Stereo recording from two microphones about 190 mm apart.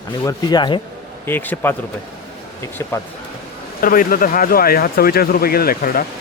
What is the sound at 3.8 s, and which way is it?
Speech, 50° left (ahead or behind).